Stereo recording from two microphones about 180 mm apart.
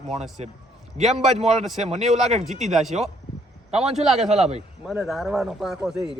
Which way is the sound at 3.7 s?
35° right (ahead or behind).